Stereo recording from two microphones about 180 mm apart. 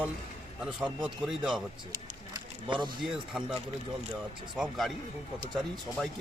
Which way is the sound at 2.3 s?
25° right (ahead or behind).